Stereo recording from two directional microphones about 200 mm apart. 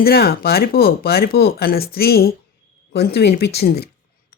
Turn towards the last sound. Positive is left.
turn(degrees=50)  # may be behind; listen again after turning